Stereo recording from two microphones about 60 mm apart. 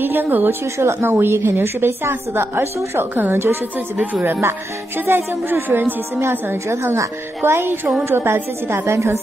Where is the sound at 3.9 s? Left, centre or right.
Right.